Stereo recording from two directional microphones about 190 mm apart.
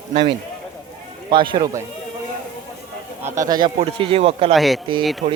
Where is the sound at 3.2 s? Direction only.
15° right (ahead or behind).